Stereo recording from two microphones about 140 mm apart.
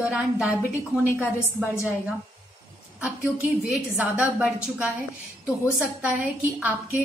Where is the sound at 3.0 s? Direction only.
5° right (ahead or behind).